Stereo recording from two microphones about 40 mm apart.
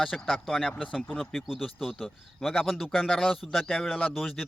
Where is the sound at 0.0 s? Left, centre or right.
Centre.